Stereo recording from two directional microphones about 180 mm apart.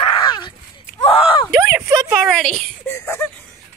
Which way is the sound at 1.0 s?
30° left (ahead or behind).